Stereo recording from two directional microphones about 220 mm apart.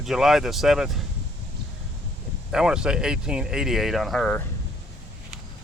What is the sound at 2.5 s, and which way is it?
Speech, 5° right (ahead or behind).